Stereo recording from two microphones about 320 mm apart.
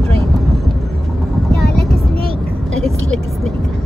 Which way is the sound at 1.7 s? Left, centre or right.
Left.